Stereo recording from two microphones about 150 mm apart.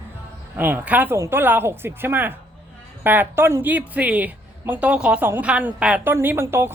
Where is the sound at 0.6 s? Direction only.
10° right (ahead or behind).